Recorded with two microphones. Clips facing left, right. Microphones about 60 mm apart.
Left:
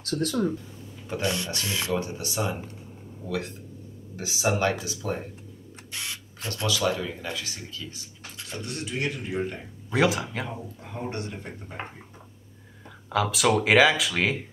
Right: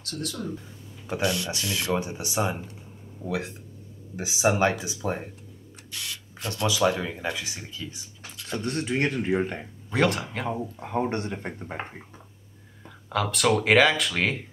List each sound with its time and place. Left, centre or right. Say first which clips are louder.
0.2 s speech: left 7 dB; left
1.0 s speech: right 2 dB; centre
1.6 s speech: even; left
1.9 s speech: right 1 dB; centre
5.9 s printer: left 1 dB; left
6.5 s speech: right 3 dB; right
8.5 s speech: right 6 dB; right
9.8 s speech: left 1 dB; centre
10.8 s speech: right 6 dB; right
11.8 s speech: left 2 dB; centre
13.1 s speech: left 1 dB; centre